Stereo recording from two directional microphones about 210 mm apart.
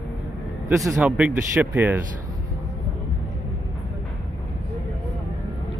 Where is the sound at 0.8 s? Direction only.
Centre (ahead or behind).